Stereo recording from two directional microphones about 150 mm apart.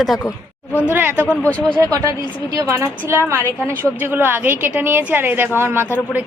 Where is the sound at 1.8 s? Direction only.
20° right (ahead or behind).